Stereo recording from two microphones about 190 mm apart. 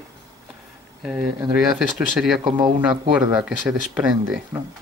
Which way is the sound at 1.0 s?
5° right (ahead or behind).